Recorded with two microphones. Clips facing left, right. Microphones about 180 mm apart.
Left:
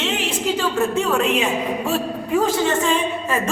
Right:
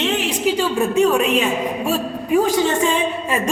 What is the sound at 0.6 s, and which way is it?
A man's voice, 15° right (ahead or behind).